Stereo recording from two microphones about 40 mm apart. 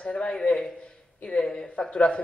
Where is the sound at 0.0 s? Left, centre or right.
Left.